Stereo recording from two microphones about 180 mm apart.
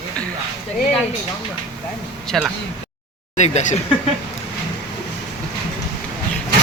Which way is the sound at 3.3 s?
40° left (ahead or behind).